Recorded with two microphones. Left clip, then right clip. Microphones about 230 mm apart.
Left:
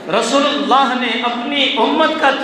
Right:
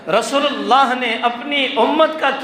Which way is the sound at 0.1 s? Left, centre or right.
Right.